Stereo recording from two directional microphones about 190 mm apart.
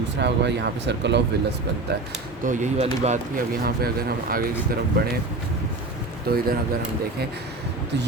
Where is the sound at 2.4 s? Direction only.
40° right (ahead or behind).